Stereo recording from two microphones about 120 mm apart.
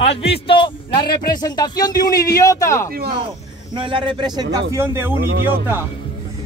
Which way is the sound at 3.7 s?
45° right (ahead or behind).